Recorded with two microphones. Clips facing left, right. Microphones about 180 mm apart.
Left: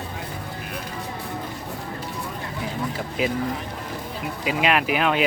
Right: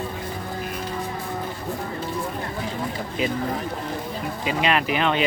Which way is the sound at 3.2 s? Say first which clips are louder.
Left 1 dB; 5° left (ahead or behind).